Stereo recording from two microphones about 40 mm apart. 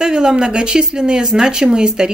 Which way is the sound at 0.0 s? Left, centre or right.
Centre.